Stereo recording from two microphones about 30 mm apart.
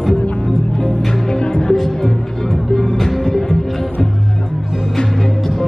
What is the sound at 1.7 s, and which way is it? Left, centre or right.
Music, centre.